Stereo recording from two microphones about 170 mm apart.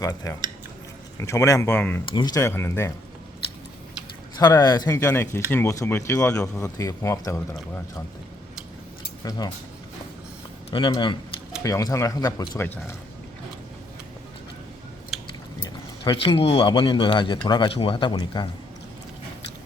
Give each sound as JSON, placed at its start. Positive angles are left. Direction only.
{"t": 0.0, "sound": "speech", "side_deg": 20}
{"t": 4.4, "sound": "speech", "side_deg": 25}
{"t": 10.7, "sound": "speech", "side_deg": 25}
{"t": 16.0, "sound": "speech", "side_deg": 30}